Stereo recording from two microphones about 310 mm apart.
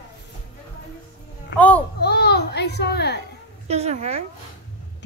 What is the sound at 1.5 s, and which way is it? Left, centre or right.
A woman's voice, left.